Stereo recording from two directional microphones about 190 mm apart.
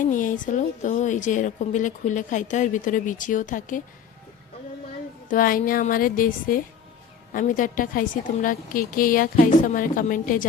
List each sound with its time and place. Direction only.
0.0 s a woman's voice: 45° left (ahead or behind)
5.3 s a woman's voice: 50° left (ahead or behind)